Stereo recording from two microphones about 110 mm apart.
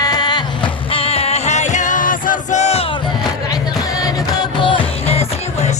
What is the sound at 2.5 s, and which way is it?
Crowd, 85° left.